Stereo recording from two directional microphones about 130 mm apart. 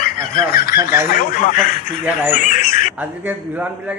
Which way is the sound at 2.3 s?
75° left (ahead or behind).